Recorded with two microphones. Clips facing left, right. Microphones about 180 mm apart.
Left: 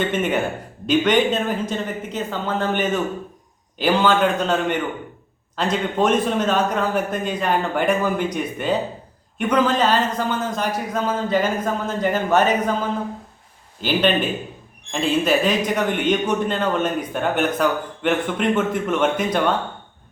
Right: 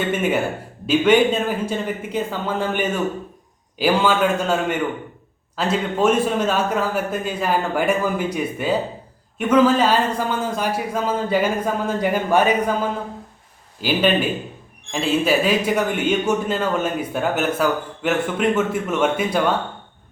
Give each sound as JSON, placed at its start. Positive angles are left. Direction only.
{"t": 0.1, "sound": "a man's voice", "side_deg": -5}
{"t": 13.8, "sound": "a man's voice", "side_deg": -5}